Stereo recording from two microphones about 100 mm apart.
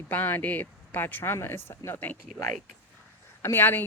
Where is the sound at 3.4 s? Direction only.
20° left (ahead or behind).